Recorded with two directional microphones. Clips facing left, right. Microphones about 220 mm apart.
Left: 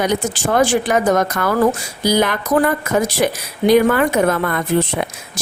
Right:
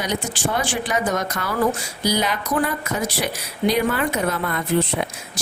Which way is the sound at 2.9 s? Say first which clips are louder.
Left 8 dB; 90° left.